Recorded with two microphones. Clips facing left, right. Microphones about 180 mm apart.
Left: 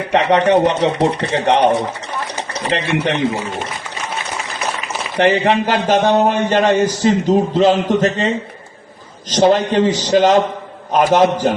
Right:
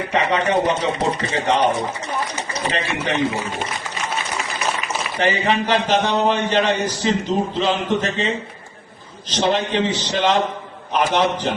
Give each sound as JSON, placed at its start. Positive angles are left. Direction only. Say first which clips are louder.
{"t": 0.1, "sound": "speech", "louder": "left 7 dB", "side_deg": 65}
{"t": 2.7, "sound": "a man's voice", "louder": "left 6 dB", "side_deg": 65}
{"t": 5.1, "sound": "speech", "louder": "left 6 dB", "side_deg": 65}
{"t": 9.3, "sound": "speech", "louder": "left 7 dB", "side_deg": 45}